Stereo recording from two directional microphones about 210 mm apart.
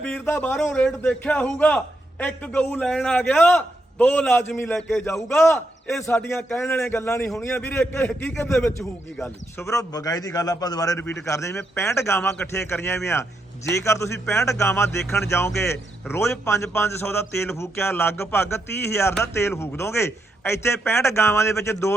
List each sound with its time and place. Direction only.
0.0 s a man's voice: 5° left (ahead or behind)